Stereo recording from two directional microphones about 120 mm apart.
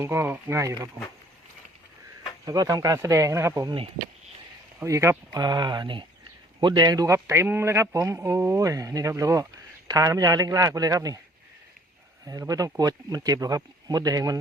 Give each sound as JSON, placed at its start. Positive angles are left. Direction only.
{"t": 0.0, "sound": "a man's voice", "side_deg": -20}
{"t": 2.4, "sound": "a man's voice", "side_deg": -30}
{"t": 4.8, "sound": "a man's voice", "side_deg": -25}
{"t": 12.2, "sound": "speech", "side_deg": -30}